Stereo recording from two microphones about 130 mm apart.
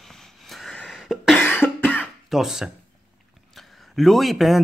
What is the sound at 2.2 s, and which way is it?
Speech, 5° right (ahead or behind).